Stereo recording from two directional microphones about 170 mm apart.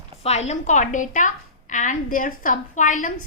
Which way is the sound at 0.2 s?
40° left (ahead or behind).